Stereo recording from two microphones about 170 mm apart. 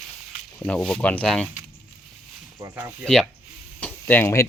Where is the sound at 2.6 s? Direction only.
15° right (ahead or behind).